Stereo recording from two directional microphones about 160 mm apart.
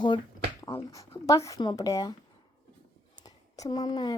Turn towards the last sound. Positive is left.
turn(degrees=25)  # may be behind; listen again after turning